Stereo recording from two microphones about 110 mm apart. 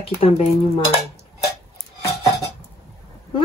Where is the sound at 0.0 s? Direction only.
60° left (ahead or behind).